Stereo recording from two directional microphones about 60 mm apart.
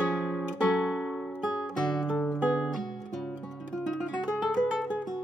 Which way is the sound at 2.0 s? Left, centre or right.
Centre.